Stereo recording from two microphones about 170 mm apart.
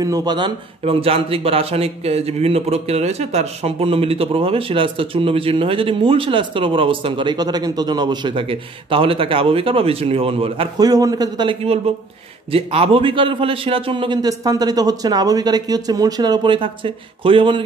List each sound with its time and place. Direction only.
0.0 s a man's voice: 20° right (ahead or behind)